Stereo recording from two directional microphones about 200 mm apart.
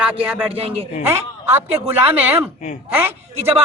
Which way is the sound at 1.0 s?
15° right (ahead or behind).